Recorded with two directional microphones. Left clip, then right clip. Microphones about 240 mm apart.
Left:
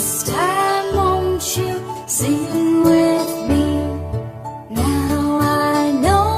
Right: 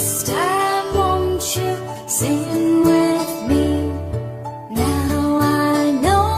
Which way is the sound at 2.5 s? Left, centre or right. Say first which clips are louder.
Left 1 dB; right.